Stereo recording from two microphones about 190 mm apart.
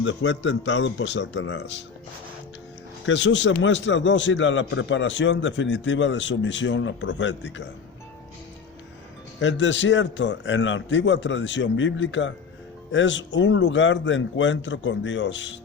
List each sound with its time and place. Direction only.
0.0 s a man's voice: 70° left (ahead or behind)
3.1 s a man's voice: 75° left (ahead or behind)
9.4 s a man's voice: 75° left (ahead or behind)